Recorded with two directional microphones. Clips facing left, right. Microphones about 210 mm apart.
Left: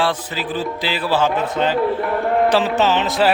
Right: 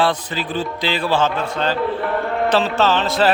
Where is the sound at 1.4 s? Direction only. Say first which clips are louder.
Left 2 dB; 20° left (ahead or behind).